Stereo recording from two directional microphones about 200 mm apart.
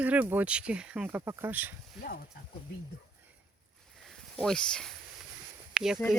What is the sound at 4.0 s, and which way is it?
Snake, centre (ahead or behind).